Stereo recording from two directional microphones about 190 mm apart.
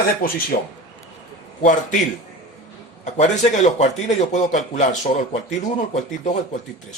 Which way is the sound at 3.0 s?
40° left (ahead or behind).